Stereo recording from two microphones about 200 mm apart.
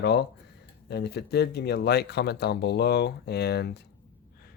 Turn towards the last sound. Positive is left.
turn(degrees=55)  # may be behind; listen again after turning